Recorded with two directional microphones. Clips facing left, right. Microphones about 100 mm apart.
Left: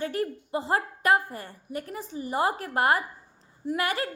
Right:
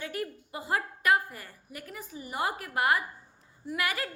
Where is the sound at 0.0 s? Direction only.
35° left (ahead or behind).